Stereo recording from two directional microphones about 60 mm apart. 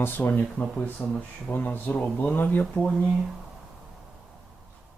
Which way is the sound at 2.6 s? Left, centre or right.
Centre.